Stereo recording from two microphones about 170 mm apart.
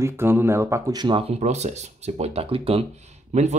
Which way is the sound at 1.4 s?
40° right (ahead or behind).